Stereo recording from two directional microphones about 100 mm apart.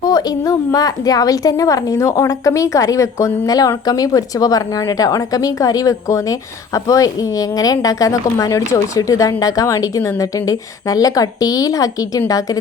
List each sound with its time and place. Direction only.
0.0 s a woman's voice: 40° left (ahead or behind)